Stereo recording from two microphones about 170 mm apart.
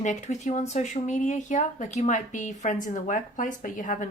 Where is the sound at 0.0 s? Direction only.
45° left (ahead or behind).